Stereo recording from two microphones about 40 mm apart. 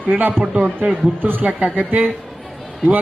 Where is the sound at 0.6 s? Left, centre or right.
Right.